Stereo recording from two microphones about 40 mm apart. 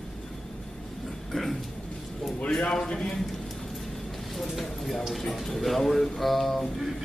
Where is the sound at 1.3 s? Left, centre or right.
Centre.